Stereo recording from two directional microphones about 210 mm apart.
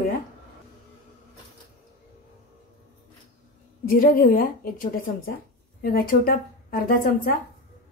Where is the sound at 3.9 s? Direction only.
40° left (ahead or behind).